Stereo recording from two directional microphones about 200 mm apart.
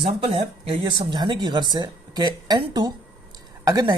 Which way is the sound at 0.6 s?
25° right (ahead or behind).